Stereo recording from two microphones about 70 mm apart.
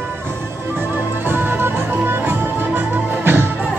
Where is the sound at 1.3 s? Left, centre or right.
Right.